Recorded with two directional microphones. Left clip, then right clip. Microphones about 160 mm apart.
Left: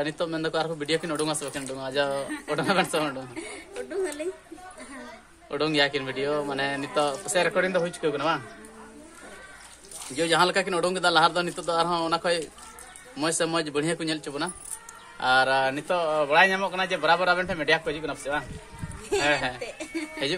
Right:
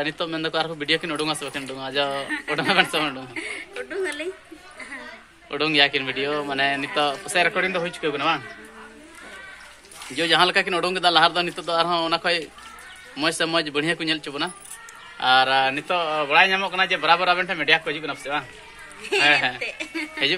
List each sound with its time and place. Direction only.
0.0 s speech: centre (ahead or behind)
3.3 s a woman's voice: 20° left (ahead or behind)
5.5 s speech: 5° right (ahead or behind)
10.1 s speech: centre (ahead or behind)
19.6 s a woman's voice: 25° left (ahead or behind)